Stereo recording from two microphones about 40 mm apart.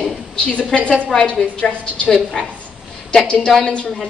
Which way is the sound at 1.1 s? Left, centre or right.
Left.